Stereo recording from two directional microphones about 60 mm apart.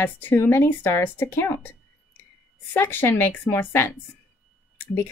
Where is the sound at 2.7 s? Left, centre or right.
Left.